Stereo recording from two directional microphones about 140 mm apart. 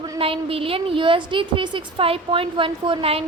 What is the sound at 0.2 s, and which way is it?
A woman's voice, 40° right (ahead or behind).